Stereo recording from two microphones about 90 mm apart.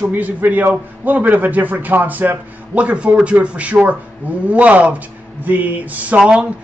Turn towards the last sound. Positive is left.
turn(degrees=-10)  # may be behind; listen again after turning